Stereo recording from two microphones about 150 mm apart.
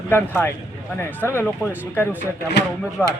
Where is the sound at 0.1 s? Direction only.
15° left (ahead or behind).